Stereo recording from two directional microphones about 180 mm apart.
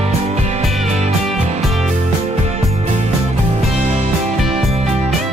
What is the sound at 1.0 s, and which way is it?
Music, 35° right (ahead or behind).